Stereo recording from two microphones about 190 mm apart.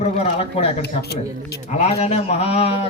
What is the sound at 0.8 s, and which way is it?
Speech, 60° left (ahead or behind).